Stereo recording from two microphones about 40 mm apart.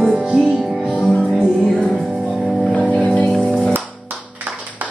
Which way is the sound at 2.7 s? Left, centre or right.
Left.